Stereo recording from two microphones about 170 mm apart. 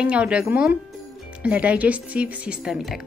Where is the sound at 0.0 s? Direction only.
5° right (ahead or behind).